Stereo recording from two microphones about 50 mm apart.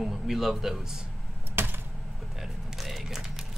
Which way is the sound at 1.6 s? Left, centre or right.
Right.